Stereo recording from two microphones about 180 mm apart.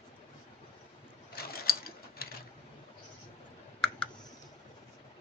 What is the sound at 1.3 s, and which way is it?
Mechanisms, 55° left (ahead or behind).